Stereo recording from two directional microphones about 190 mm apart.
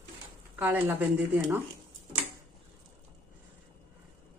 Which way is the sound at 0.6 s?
10° right (ahead or behind).